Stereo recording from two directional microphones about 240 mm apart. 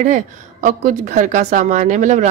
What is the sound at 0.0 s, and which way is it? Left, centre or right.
A woman's voice, right.